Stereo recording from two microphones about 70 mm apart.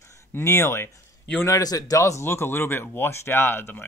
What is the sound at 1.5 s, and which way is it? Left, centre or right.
Speech, left.